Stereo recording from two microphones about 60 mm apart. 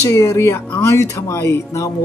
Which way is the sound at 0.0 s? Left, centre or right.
Left.